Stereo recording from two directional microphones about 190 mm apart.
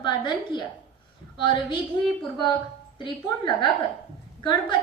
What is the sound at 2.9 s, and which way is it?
A woman's voice, 25° left (ahead or behind).